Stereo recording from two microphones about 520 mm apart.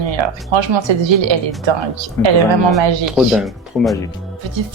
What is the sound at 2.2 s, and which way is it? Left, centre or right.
Speech, centre.